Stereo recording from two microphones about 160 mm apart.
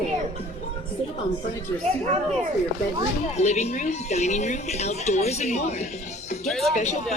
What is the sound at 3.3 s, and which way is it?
Speech, 45° left (ahead or behind).